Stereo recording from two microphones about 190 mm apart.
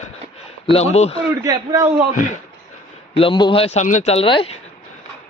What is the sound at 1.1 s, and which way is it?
Speech, 20° right (ahead or behind).